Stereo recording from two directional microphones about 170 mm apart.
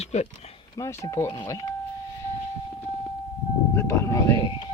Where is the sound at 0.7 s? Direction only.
20° left (ahead or behind).